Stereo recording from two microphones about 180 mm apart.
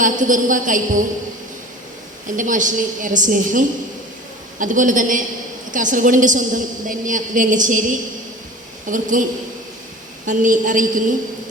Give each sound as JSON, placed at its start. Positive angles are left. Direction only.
{"t": 0.0, "sound": "a woman's voice", "side_deg": -45}
{"t": 2.2, "sound": "a woman's voice", "side_deg": -45}
{"t": 10.2, "sound": "a woman's voice", "side_deg": -45}